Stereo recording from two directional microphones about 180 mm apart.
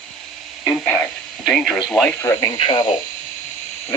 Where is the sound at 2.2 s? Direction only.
15° left (ahead or behind).